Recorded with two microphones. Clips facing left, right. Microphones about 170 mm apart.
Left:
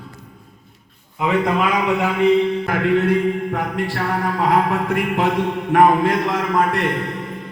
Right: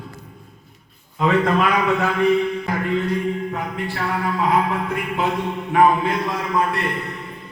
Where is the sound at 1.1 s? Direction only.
15° left (ahead or behind).